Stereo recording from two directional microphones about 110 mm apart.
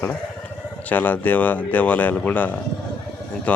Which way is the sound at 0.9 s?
15° left (ahead or behind).